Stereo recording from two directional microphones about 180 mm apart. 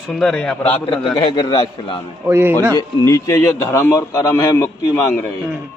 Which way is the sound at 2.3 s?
15° right (ahead or behind).